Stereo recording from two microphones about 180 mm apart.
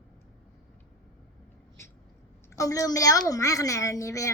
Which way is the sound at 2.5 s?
20° left (ahead or behind).